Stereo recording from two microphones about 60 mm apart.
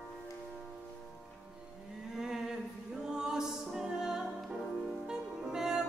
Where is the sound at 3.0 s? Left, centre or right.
Centre.